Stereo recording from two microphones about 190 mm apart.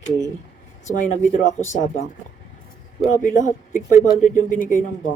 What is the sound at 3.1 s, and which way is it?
Speech, 40° left (ahead or behind).